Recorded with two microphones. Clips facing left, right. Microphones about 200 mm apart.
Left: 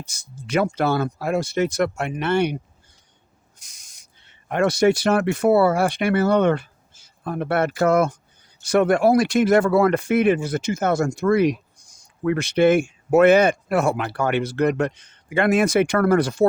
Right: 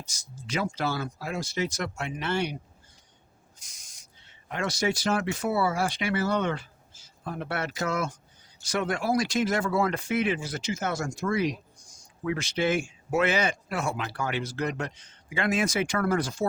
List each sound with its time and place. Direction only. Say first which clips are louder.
0.0 s speech: left 5 dB; 60° left (ahead or behind)
3.6 s speech: even; 60° left (ahead or behind)